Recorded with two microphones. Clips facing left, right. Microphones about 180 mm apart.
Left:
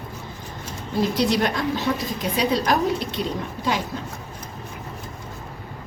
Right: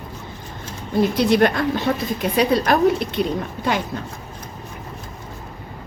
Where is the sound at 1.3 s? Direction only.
60° right (ahead or behind).